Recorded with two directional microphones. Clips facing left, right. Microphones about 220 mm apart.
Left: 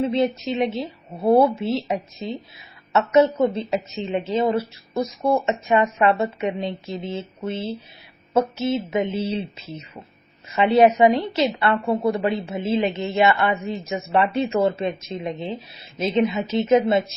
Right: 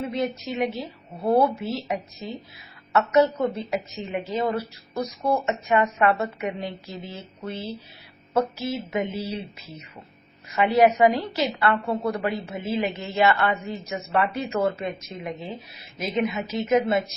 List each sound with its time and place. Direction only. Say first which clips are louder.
0.0 s a woman's voice: left 6 dB; 25° left (ahead or behind)